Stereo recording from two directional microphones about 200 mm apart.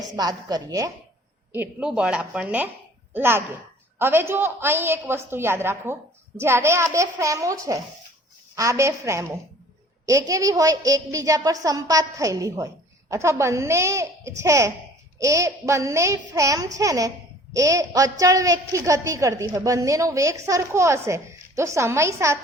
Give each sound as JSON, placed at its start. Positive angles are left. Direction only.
{"t": 0.2, "sound": "a woman's voice", "side_deg": -20}
{"t": 1.5, "sound": "a woman's voice", "side_deg": -5}